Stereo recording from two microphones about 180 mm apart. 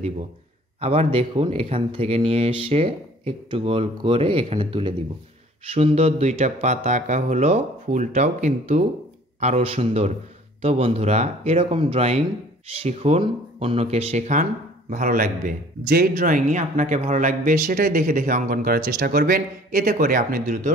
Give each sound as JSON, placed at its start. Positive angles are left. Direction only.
{"t": 0.7, "sound": "speech", "side_deg": -35}